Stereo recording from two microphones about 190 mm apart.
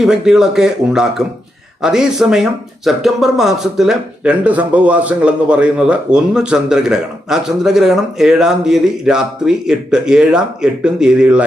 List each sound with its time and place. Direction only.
0.0 s speech: 5° right (ahead or behind)